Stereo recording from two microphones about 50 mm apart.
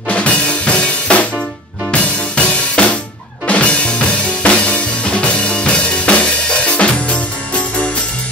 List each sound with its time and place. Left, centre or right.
0.1 s drum kit: left
1.9 s music: left